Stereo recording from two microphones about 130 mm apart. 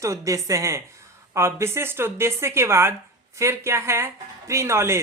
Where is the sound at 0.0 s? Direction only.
25° right (ahead or behind).